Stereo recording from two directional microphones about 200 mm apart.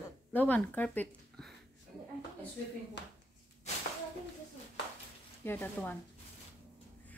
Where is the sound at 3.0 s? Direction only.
60° left (ahead or behind).